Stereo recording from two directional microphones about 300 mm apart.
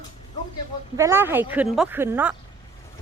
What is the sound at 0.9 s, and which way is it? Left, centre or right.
Speech, centre.